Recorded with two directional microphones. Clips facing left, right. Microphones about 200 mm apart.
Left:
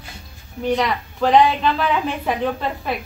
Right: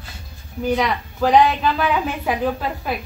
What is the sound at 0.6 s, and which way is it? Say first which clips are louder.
A woman's voice: even; centre (ahead or behind).